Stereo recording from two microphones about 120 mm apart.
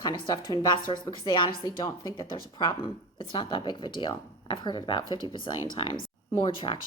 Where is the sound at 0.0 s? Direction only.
35° left (ahead or behind).